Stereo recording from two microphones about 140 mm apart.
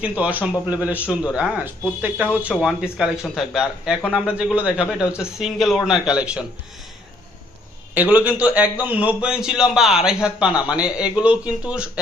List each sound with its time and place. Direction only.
0.0 s speech: 10° right (ahead or behind)
8.1 s speech: 10° right (ahead or behind)